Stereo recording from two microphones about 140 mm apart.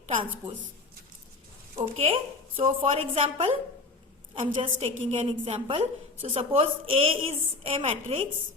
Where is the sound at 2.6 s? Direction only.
45° right (ahead or behind).